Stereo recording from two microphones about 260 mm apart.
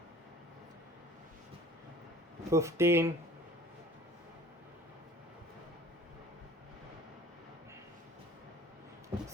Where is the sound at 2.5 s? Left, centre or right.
Centre.